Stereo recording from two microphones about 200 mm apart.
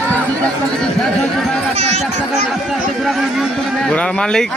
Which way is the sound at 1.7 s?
30° right (ahead or behind).